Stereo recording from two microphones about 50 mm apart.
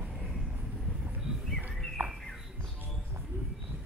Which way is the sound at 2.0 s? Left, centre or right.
Right.